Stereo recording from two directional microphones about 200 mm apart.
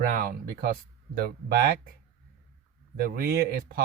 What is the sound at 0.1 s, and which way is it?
Speech, 45° right (ahead or behind).